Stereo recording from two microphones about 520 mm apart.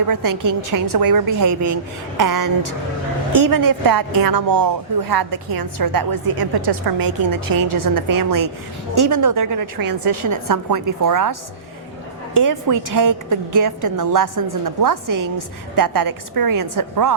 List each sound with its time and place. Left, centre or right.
0.1 s a woman's voice: right